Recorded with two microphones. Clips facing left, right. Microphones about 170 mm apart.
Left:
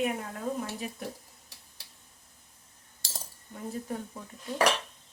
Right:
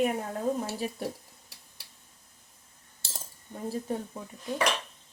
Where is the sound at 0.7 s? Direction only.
35° right (ahead or behind).